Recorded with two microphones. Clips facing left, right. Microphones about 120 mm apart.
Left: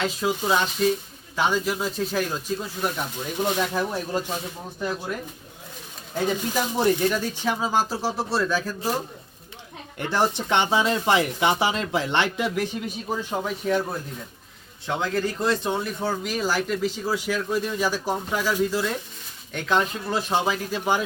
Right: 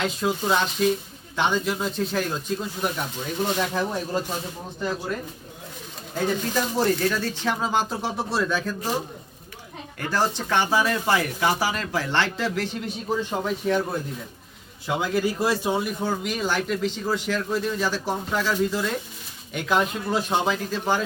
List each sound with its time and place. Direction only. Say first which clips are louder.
0.0 s speech: even; centre (ahead or behind)
4.8 s speech: right 1 dB; 5° left (ahead or behind)
6.2 s speech: even; 15° left (ahead or behind)
10.0 s speech: left 1 dB; 20° left (ahead or behind)
12.8 s speech: right 2 dB; centre (ahead or behind)
19.5 s speech: even; 5° right (ahead or behind); by 21.0 s 10° left (ahead or behind)